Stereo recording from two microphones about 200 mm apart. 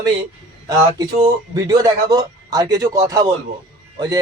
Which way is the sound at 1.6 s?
20° right (ahead or behind).